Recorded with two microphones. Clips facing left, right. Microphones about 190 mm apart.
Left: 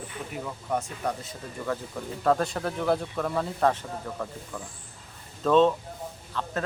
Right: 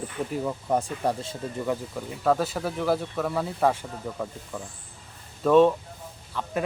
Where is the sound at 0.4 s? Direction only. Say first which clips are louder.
Right 3 dB; 35° right (ahead or behind).